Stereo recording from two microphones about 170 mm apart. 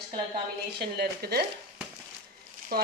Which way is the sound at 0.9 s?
70° right (ahead or behind).